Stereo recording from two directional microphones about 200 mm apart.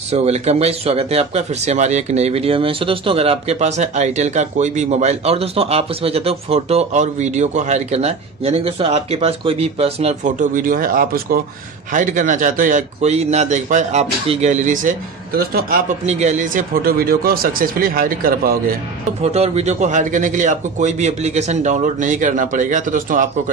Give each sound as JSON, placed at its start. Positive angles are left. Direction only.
{"t": 0.1, "sound": "speech", "side_deg": -30}
{"t": 19.2, "sound": "speech", "side_deg": -30}